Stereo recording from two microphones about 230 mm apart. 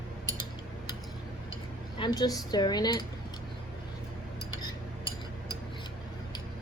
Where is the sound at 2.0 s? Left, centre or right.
Centre.